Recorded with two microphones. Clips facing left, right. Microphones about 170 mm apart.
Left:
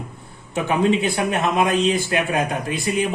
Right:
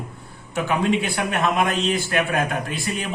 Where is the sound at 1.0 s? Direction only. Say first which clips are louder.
Left 2 dB; 20° left (ahead or behind).